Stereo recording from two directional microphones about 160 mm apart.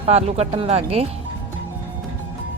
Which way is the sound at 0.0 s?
40° right (ahead or behind).